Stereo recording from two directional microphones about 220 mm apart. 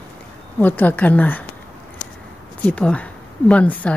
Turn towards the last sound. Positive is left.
turn(degrees=5)  # may be behind; listen again after turning